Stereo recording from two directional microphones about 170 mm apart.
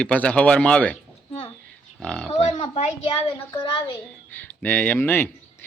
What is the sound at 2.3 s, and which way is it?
Speech, 40° left (ahead or behind).